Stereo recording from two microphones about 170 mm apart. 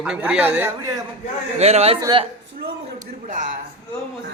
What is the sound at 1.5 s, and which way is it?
Speech, 40° right (ahead or behind).